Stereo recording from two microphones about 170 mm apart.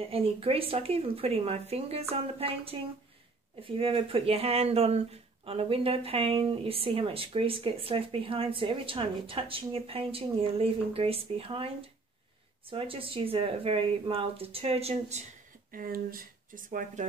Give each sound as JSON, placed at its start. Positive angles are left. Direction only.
{"t": 0.1, "sound": "speech", "side_deg": -35}
{"t": 15.7, "sound": "speech", "side_deg": -55}